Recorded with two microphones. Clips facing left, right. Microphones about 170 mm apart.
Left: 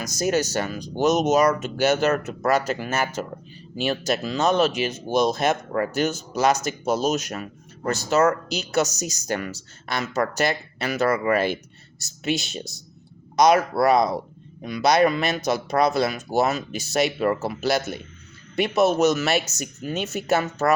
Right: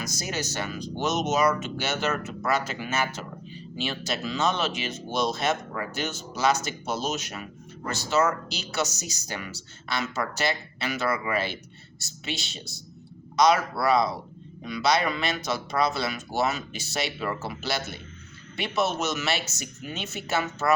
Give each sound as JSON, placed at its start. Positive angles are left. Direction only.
{"t": 0.0, "sound": "speech", "side_deg": 45}